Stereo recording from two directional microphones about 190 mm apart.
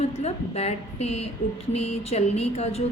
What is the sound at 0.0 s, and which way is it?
A woman's voice, 35° left (ahead or behind).